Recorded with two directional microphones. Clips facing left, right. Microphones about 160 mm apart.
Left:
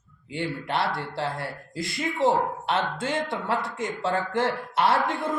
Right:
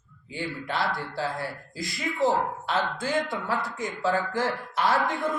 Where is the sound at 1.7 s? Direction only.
25° left (ahead or behind).